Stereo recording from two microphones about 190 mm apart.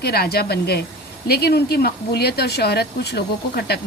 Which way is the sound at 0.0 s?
55° left (ahead or behind).